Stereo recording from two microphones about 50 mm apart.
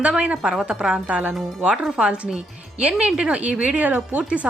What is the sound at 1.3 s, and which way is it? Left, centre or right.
Speech, centre.